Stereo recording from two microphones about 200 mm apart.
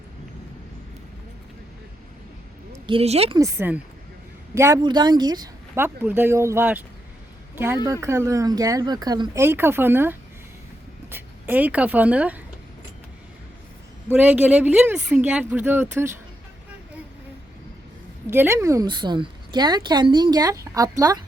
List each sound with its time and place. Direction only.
2.7 s speech: 25° right (ahead or behind)
3.3 s a woman's voice: 15° right (ahead or behind)
8.0 s a woman's voice: 15° right (ahead or behind)
14.1 s a woman's voice: 10° right (ahead or behind)
18.3 s a woman's voice: 10° right (ahead or behind)